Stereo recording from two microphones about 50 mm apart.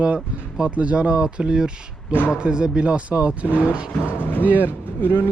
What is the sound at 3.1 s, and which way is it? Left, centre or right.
Speech, right.